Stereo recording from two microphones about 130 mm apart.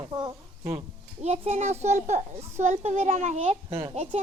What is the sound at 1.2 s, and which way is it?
A child's voice, 55° right (ahead or behind).